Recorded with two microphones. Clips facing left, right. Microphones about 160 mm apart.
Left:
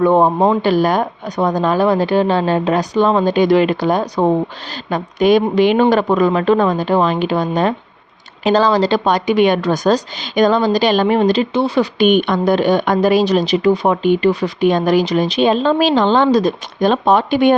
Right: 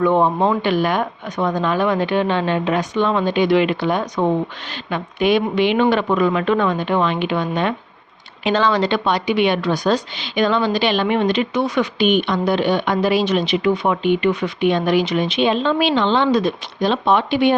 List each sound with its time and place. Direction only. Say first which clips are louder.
0.0 s a woman's voice: left 4 dB; 35° left (ahead or behind)
11.9 s a woman's voice: left 4 dB; 50° left (ahead or behind)